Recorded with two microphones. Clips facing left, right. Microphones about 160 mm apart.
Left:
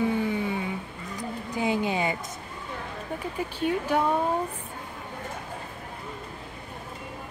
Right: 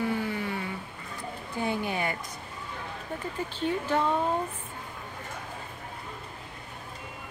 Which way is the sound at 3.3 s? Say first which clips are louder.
Left 3 dB; 15° left (ahead or behind).